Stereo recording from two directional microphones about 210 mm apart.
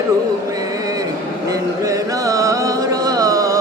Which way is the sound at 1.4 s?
15° right (ahead or behind).